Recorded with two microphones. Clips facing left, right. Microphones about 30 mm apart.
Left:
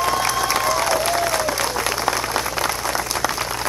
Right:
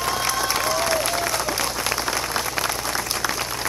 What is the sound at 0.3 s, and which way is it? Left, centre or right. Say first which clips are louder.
Applause: left 3 dB; centre.